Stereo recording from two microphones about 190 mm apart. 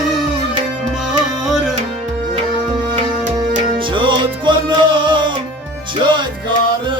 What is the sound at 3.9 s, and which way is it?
Music, 25° right (ahead or behind).